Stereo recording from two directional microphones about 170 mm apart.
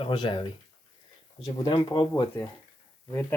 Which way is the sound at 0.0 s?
30° left (ahead or behind).